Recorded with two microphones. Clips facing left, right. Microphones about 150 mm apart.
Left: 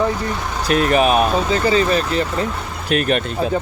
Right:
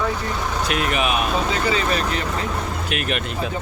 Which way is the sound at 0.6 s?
40° left (ahead or behind).